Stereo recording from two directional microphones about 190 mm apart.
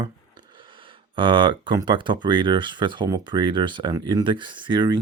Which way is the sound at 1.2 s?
25° right (ahead or behind).